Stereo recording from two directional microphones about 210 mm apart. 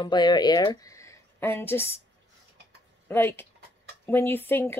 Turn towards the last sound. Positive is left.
turn(degrees=10)  # may be behind; listen again after turning